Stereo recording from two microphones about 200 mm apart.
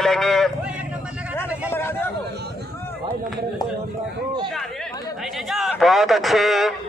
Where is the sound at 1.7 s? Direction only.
10° left (ahead or behind).